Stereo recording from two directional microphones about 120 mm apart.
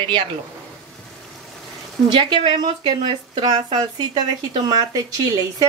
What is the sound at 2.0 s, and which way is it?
Speech, 40° right (ahead or behind).